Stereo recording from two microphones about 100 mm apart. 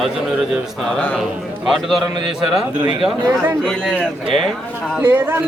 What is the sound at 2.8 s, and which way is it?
Speech, 50° right (ahead or behind).